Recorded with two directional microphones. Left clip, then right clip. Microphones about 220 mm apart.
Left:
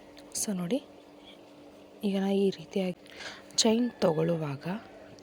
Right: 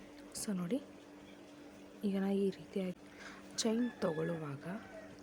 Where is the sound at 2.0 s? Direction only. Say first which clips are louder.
Left 8 dB; 15° left (ahead or behind).